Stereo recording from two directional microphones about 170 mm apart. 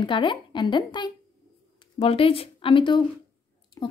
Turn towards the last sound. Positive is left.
turn(degrees=30)  # may be behind; listen again after turning